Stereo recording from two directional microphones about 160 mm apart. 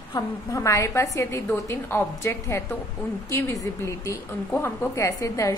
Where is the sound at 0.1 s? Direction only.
20° left (ahead or behind).